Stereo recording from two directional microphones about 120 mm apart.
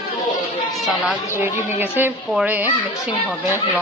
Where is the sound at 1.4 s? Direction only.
15° right (ahead or behind).